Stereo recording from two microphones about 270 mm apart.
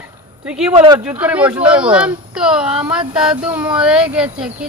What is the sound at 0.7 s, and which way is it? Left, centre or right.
Speech, right.